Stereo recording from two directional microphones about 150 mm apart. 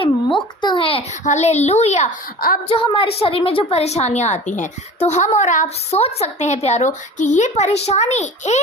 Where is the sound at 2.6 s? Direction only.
35° left (ahead or behind).